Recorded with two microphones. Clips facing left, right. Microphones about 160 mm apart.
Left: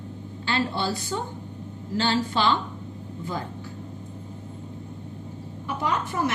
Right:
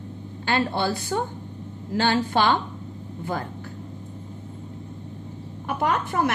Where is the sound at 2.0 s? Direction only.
50° right (ahead or behind).